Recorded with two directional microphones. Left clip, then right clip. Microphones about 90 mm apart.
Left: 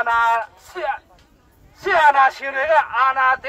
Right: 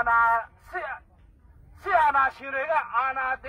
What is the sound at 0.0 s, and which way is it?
A man's voice, 15° left (ahead or behind).